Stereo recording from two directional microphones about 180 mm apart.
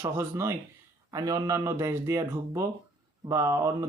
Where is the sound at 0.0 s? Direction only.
15° right (ahead or behind).